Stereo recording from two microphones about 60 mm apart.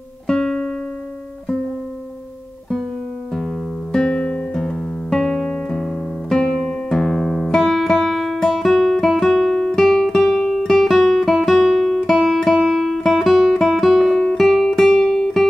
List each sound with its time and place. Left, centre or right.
0.3 s music: centre
3.9 s music: centre